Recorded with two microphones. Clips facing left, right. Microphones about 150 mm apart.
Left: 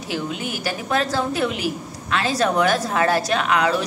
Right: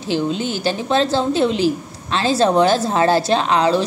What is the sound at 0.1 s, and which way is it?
A woman's voice, 30° right (ahead or behind).